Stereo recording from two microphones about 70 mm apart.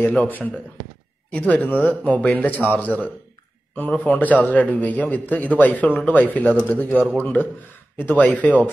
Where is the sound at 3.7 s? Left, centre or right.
Left.